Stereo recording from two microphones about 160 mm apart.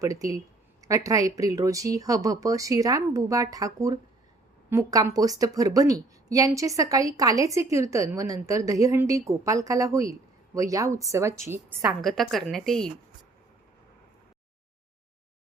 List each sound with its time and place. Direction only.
0.0 s a woman's voice: 20° right (ahead or behind)
11.9 s a woman's voice: centre (ahead or behind)